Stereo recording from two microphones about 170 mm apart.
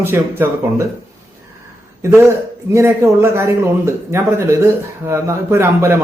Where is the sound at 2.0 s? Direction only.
15° right (ahead or behind).